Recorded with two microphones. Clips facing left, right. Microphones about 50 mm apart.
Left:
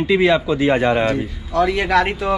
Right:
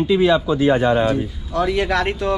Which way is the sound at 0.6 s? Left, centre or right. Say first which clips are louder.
Even; left.